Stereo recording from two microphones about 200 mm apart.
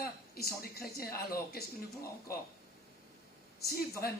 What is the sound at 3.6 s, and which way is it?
Speech, 50° left (ahead or behind).